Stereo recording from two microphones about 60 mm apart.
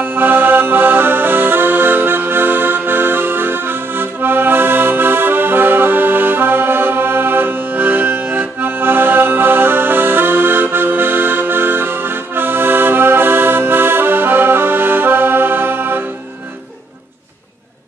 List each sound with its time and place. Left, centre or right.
0.0 s accordion: right